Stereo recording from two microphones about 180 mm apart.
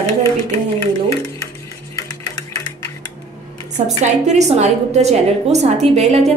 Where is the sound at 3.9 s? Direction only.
40° right (ahead or behind).